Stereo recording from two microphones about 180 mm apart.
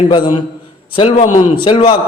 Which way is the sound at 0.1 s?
25° left (ahead or behind).